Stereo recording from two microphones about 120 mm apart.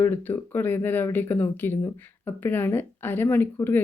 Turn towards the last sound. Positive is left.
turn(degrees=15)  # may be behind; listen again after turning